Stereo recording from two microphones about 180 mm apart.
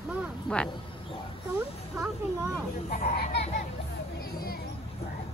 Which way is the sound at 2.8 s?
50° left (ahead or behind).